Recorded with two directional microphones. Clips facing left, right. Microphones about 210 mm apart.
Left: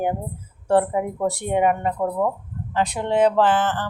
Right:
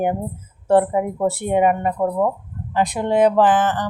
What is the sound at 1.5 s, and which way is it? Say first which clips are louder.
Speech: right 2 dB; 15° right (ahead or behind).